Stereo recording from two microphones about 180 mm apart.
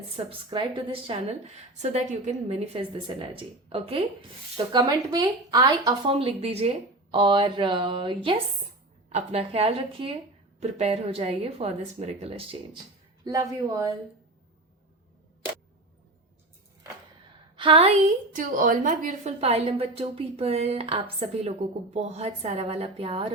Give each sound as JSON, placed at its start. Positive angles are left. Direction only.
{"t": 0.3, "sound": "a woman's voice", "side_deg": -30}
{"t": 13.2, "sound": "speech", "side_deg": -20}
{"t": 17.6, "sound": "a woman's voice", "side_deg": -30}
{"t": 18.3, "sound": "a woman's voice", "side_deg": -50}